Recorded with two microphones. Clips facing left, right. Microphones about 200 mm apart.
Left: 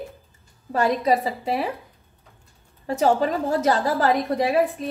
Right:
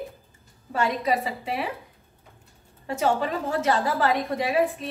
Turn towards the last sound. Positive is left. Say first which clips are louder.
# left 4 dB
turn(degrees=40)  # may be behind; listen again after turning